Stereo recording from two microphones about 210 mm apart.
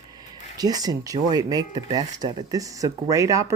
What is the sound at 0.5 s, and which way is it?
Speech, 20° right (ahead or behind).